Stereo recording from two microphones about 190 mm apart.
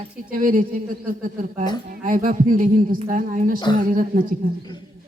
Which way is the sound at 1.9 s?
45° right (ahead or behind).